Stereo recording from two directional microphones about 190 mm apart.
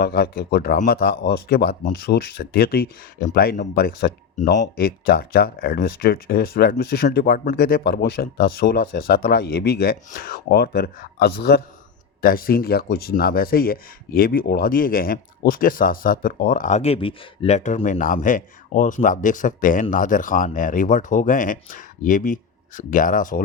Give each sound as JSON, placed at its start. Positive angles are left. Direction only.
{"t": 0.0, "sound": "speech", "side_deg": 55}